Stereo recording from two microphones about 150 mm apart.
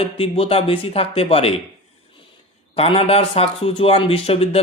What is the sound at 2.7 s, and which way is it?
A man's voice, 40° left (ahead or behind).